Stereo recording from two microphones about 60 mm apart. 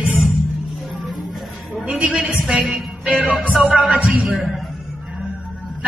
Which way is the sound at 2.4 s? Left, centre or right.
Centre.